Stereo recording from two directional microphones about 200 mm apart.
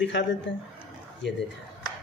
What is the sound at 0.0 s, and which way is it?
Speech, 65° left (ahead or behind).